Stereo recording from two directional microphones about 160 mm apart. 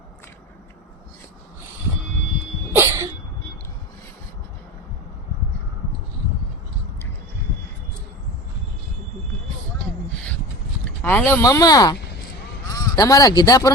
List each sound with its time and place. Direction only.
2.7 s cough: 15° right (ahead or behind)
11.0 s speech: 10° left (ahead or behind)